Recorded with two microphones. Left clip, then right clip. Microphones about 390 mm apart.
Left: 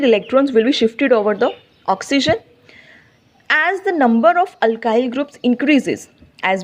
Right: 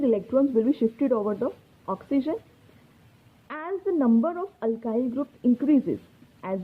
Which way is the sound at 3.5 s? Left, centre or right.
Centre.